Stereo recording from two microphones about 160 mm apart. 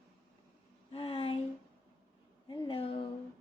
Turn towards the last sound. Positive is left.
turn(degrees=35)  # may be behind; listen again after turning